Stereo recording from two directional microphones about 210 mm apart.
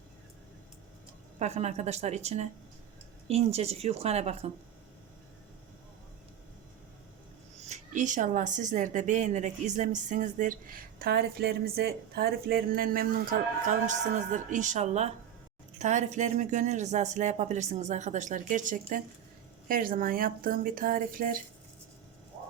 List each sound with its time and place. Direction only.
1.4 s a woman's voice: 30° right (ahead or behind)
7.7 s a woman's voice: 35° right (ahead or behind)
14.3 s a woman's voice: 35° right (ahead or behind)